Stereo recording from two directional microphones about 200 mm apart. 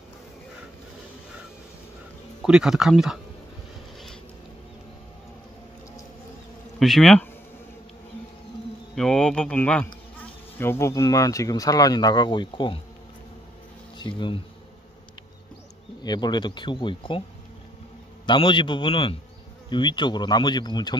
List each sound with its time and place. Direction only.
2.4 s speech: 5° right (ahead or behind)
6.8 s speech: centre (ahead or behind)
8.9 s speech: 5° left (ahead or behind)
10.2 s insect: 10° left (ahead or behind)
13.9 s speech: 25° left (ahead or behind)
16.0 s speech: 20° left (ahead or behind)
18.2 s speech: 25° left (ahead or behind)